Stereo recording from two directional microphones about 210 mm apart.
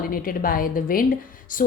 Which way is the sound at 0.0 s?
45° left (ahead or behind).